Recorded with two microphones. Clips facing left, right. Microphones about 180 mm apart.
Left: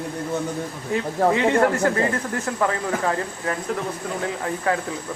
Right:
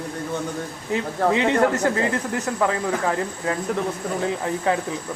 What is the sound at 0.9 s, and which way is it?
Speech, 20° right (ahead or behind).